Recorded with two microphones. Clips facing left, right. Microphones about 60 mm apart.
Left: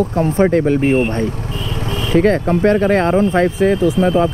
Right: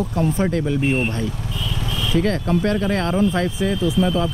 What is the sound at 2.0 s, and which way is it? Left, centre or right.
Speech, left.